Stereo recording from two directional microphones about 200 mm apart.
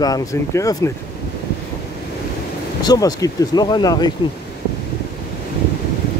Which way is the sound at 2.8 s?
20° left (ahead or behind).